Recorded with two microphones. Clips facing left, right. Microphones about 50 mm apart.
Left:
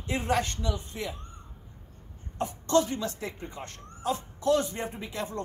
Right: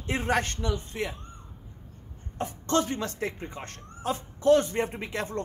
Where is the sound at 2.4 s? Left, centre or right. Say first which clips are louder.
Left 2 dB; right.